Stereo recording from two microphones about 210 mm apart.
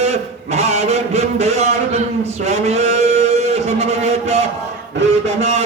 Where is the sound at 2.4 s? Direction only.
30° right (ahead or behind).